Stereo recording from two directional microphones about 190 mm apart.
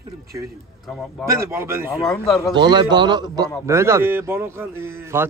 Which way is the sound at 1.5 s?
15° right (ahead or behind).